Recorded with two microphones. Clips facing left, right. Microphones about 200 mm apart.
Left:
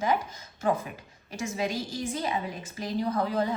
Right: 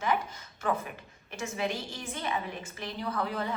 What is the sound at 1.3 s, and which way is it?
A woman's voice, 35° left (ahead or behind).